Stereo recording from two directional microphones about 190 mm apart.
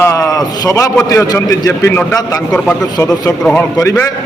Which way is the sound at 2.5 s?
5° left (ahead or behind).